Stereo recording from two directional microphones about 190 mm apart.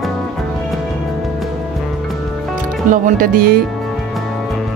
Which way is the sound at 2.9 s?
50° right (ahead or behind).